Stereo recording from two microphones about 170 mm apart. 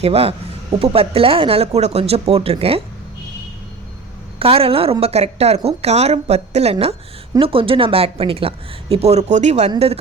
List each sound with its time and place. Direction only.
0.0 s a woman's voice: 35° right (ahead or behind)
4.4 s a woman's voice: 35° right (ahead or behind)